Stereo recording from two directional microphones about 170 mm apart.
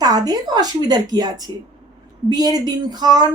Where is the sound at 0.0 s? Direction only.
20° right (ahead or behind).